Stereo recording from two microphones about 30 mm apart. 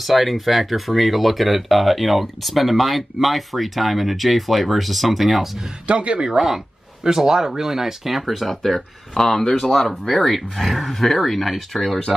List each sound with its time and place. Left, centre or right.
0.0 s speech: centre
5.9 s a man's voice: right
6.4 s speech: centre
8.6 s speech: centre